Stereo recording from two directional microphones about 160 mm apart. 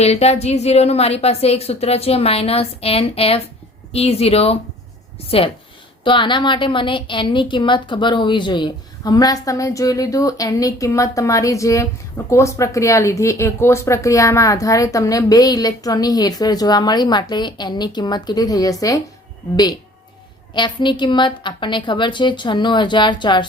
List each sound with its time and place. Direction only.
0.0 s a woman's voice: 40° left (ahead or behind)
6.1 s a woman's voice: 30° left (ahead or behind)